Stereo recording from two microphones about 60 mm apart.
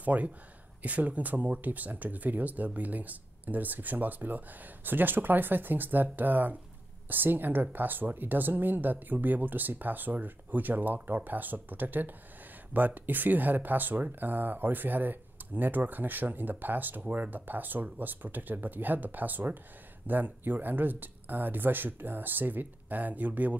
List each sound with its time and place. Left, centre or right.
0.0 s speech: right